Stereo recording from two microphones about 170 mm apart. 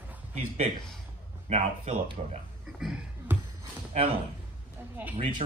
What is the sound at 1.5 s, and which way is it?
Speech, 40° right (ahead or behind).